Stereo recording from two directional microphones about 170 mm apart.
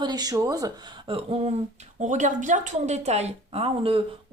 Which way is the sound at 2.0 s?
45° right (ahead or behind).